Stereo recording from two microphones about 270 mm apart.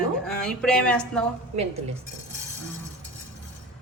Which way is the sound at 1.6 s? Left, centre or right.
Right.